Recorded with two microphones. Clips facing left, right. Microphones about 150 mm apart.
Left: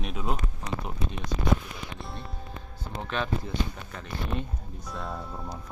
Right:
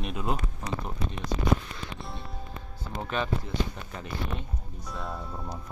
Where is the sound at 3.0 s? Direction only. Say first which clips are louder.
Right 1 dB; 5° right (ahead or behind).